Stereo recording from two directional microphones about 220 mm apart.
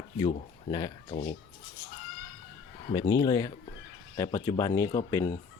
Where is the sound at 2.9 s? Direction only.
20° left (ahead or behind).